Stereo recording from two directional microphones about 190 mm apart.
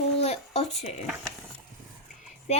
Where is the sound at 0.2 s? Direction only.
35° left (ahead or behind).